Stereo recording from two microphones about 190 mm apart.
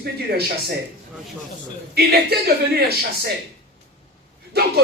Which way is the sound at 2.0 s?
55° right (ahead or behind).